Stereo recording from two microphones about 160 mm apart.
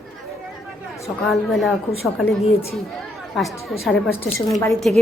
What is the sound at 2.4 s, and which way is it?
Speech, 40° left (ahead or behind).